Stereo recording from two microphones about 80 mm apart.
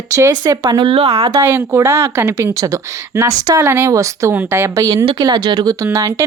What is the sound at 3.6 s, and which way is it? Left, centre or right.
A woman's voice, right.